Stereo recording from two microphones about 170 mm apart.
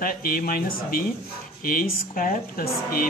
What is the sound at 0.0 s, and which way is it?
Speech, 60° left (ahead or behind).